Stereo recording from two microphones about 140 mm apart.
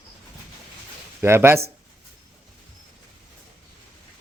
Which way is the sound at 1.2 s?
15° right (ahead or behind).